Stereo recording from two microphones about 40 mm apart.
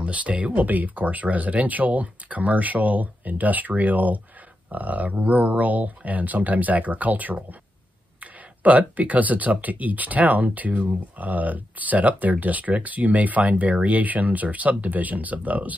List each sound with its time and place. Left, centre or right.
0.0 s speech: right